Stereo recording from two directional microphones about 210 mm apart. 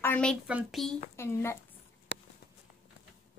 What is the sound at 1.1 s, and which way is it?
Speech, 10° left (ahead or behind).